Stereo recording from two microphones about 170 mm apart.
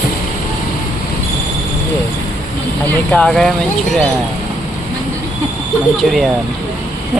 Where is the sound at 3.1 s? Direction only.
5° left (ahead or behind).